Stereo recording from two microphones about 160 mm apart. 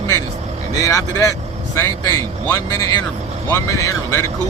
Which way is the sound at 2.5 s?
20° left (ahead or behind).